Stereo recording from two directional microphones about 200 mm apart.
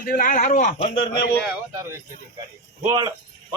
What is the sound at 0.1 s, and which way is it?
Speech, 45° left (ahead or behind).